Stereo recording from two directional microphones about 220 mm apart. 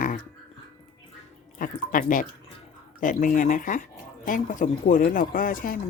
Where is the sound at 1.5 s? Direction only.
35° left (ahead or behind).